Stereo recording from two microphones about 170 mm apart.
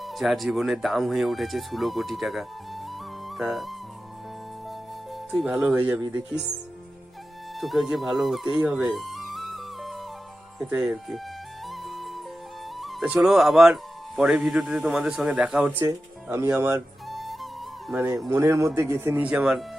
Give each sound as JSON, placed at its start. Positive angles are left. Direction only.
{"t": 0.0, "sound": "speech", "side_deg": 0}
{"t": 3.2, "sound": "music", "side_deg": 0}
{"t": 5.3, "sound": "speech", "side_deg": 0}
{"t": 7.6, "sound": "speech", "side_deg": 0}
{"t": 11.7, "sound": "music", "side_deg": 0}
{"t": 12.8, "sound": "speech", "side_deg": 0}
{"t": 15.8, "sound": "speech", "side_deg": -15}
{"t": 17.1, "sound": "music", "side_deg": 0}
{"t": 17.9, "sound": "speech", "side_deg": -15}